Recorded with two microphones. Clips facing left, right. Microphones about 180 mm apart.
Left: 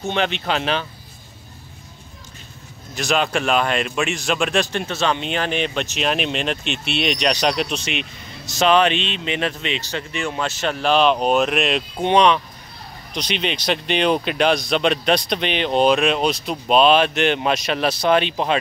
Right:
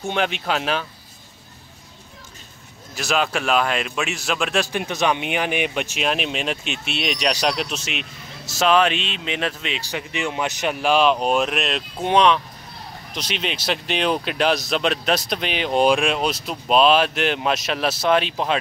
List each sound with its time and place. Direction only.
0.1 s speech: 5° right (ahead or behind)
2.9 s speech: 5° right (ahead or behind)